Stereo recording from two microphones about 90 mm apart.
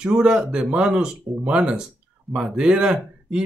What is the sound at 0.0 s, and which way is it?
Speech, 10° right (ahead or behind).